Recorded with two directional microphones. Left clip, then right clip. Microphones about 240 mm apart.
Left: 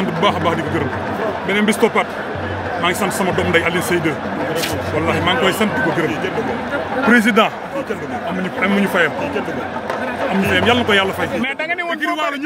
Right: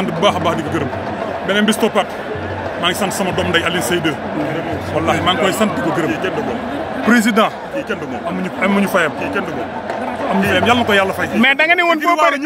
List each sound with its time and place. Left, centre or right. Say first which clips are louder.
0.2 s speech: right 2 dB; centre
7.1 s speech: even; centre
8.6 s speech: right 1 dB; centre
10.5 s speech: right 1 dB; centre
11.4 s a man's voice: right 9 dB; right